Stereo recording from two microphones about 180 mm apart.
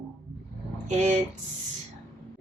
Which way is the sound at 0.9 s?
40° right (ahead or behind).